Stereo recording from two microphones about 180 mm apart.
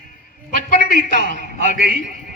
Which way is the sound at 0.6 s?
45° left (ahead or behind).